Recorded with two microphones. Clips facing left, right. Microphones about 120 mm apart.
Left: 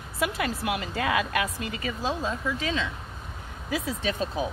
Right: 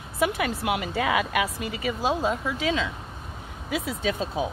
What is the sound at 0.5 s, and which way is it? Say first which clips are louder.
Speech: right 3 dB; 25° right (ahead or behind).